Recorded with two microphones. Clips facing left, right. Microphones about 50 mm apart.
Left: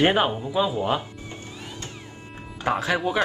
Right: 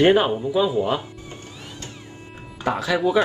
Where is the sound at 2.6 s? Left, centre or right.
Left.